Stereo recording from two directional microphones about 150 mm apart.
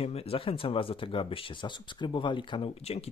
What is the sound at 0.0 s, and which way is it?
Speech, 40° left (ahead or behind).